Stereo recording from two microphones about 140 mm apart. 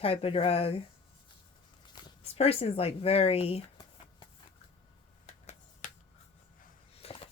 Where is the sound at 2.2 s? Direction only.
45° left (ahead or behind).